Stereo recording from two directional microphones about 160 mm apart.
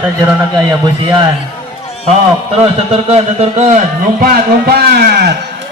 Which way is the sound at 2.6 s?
35° right (ahead or behind).